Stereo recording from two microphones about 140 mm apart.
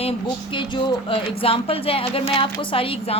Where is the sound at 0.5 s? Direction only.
35° left (ahead or behind).